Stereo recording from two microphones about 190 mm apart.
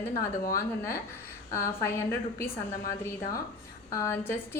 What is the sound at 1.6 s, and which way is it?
Speech, 15° left (ahead or behind).